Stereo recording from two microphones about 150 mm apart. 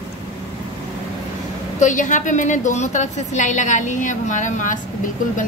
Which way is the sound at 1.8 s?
55° left (ahead or behind).